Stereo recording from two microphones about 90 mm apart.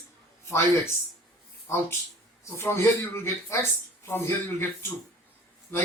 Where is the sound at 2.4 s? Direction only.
30° left (ahead or behind).